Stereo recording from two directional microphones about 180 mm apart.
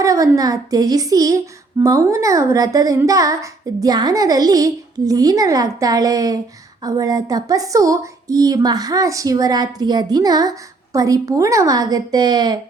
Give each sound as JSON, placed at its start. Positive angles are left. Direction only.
{"t": 0.0, "sound": "a woman's voice", "side_deg": -20}